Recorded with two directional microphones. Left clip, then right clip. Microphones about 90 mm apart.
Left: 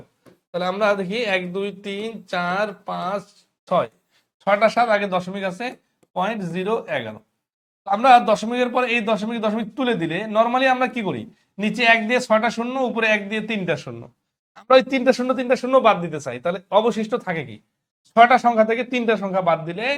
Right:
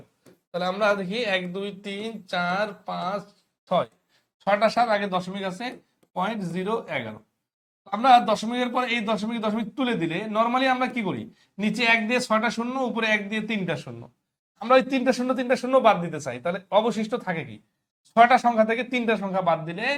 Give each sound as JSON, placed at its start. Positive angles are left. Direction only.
{"t": 0.3, "sound": "speech", "side_deg": 35}